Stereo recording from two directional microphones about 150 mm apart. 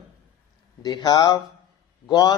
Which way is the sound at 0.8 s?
25° left (ahead or behind).